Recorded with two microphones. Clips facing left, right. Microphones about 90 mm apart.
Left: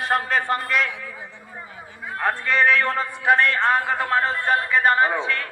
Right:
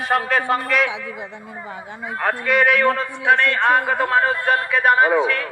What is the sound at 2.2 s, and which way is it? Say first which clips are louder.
A man's voice: right 2 dB; 5° right (ahead or behind).